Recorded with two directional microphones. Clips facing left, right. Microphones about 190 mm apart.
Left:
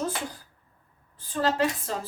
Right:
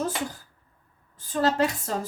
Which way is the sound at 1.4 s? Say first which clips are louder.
Right 2 dB; 45° right (ahead or behind).